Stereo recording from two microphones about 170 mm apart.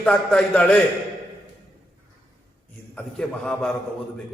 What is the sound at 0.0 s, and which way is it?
Speech, 5° left (ahead or behind).